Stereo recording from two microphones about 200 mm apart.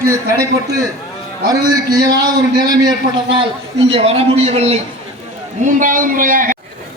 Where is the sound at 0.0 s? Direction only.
15° right (ahead or behind).